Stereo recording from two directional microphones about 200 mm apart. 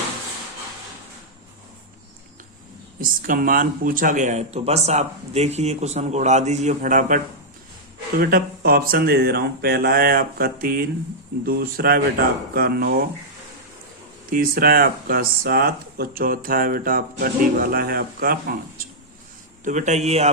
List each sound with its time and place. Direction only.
3.0 s speech: 45° right (ahead or behind)
8.2 s speech: 45° right (ahead or behind)
14.3 s speech: 45° right (ahead or behind)
19.6 s speech: 35° right (ahead or behind)